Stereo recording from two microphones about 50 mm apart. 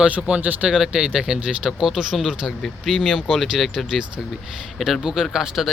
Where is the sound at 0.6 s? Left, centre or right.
Centre.